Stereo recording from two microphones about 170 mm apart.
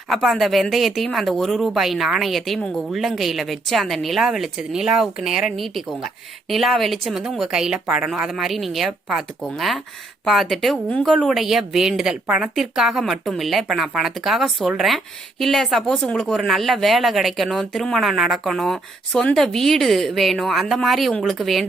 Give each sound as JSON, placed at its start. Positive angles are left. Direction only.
{"t": 0.1, "sound": "speech", "side_deg": 0}